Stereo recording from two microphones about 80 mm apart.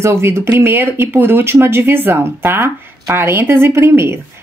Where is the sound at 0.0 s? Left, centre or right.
Right.